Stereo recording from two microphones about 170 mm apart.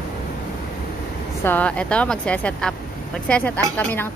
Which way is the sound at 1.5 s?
10° left (ahead or behind).